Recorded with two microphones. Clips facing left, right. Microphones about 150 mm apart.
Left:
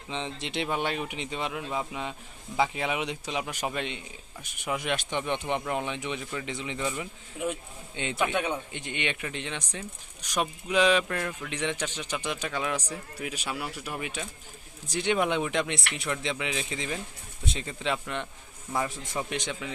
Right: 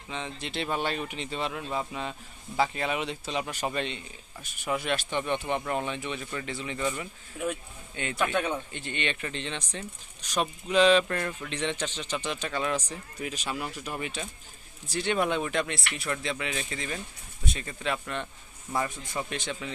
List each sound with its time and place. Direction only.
0.1 s speech: 25° left (ahead or behind)